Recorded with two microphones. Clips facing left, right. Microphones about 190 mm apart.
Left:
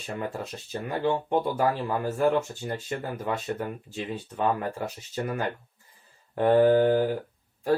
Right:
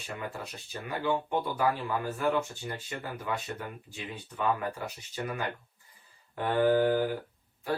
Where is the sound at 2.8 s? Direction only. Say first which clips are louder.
Left 5 dB; 45° left (ahead or behind).